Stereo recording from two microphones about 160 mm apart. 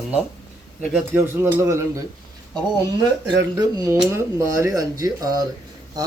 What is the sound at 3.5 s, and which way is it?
Speech, 20° right (ahead or behind).